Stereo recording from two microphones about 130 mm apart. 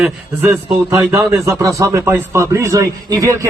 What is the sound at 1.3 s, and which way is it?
A man's voice, 25° right (ahead or behind).